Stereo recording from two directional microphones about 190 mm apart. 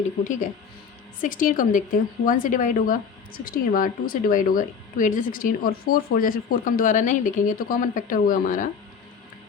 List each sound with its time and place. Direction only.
1.2 s a woman's voice: 45° left (ahead or behind)